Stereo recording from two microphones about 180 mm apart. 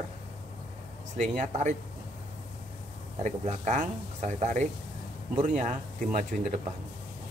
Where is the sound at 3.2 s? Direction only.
40° right (ahead or behind).